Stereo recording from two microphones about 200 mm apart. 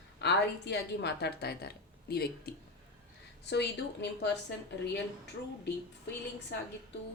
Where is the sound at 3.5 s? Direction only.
60° left (ahead or behind).